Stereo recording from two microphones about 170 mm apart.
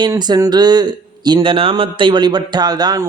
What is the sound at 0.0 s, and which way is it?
Speech, 25° right (ahead or behind).